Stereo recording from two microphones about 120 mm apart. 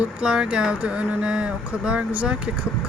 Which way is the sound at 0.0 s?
5° right (ahead or behind).